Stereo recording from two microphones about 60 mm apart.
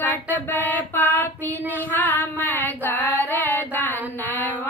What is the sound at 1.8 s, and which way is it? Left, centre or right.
Female singing, left.